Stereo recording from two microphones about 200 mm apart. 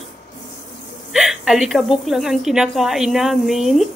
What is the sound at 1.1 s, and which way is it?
A woman's voice, centre (ahead or behind).